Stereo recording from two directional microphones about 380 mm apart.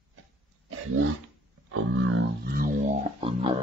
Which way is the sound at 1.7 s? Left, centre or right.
Right.